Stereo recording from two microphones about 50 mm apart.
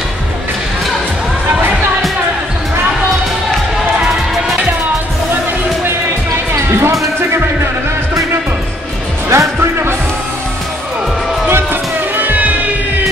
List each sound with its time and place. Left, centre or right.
6.7 s music: right
9.3 s music: right
12.2 s music: right